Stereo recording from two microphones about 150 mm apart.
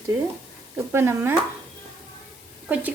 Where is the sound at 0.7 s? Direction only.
15° right (ahead or behind).